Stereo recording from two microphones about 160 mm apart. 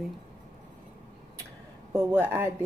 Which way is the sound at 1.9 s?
15° right (ahead or behind).